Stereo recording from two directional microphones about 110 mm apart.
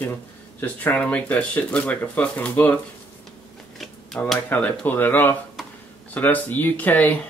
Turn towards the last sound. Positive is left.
turn(degrees=15)  # may be behind; listen again after turning